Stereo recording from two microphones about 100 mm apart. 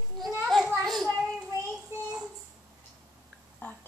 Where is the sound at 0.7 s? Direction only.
Centre (ahead or behind).